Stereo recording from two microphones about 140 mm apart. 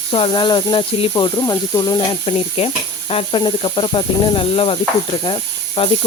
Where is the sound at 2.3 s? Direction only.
45° left (ahead or behind).